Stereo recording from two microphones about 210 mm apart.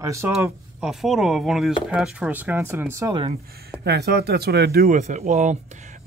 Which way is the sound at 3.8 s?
50° right (ahead or behind).